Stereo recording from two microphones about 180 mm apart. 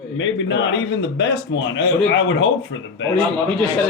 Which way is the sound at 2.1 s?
90° left.